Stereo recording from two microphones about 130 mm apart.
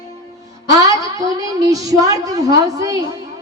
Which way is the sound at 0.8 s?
25° right (ahead or behind).